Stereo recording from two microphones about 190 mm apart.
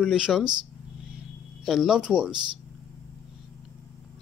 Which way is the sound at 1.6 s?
Centre (ahead or behind).